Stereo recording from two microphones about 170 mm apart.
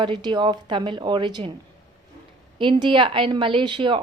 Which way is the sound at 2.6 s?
30° right (ahead or behind).